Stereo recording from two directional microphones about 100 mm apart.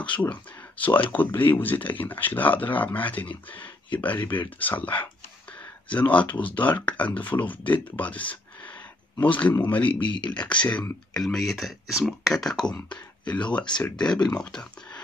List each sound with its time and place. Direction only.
0.2 s speech: 15° left (ahead or behind)
10.0 s speech: 55° left (ahead or behind)
10.5 s speech: 10° left (ahead or behind)